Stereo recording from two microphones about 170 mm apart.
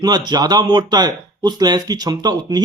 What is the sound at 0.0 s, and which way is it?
Speech, 25° right (ahead or behind).